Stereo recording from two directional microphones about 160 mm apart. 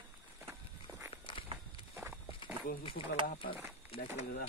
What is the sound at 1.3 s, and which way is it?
Walk, 30° left (ahead or behind).